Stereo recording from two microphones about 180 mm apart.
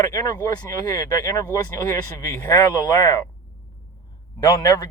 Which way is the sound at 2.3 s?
15° left (ahead or behind).